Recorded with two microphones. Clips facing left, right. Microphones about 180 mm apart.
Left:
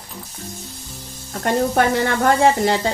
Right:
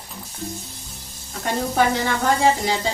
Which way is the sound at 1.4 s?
55° left (ahead or behind).